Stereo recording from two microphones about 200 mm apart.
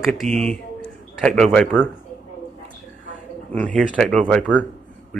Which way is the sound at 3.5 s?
5° left (ahead or behind).